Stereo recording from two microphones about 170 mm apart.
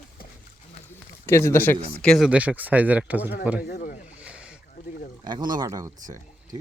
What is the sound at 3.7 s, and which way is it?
Speech, 55° left (ahead or behind).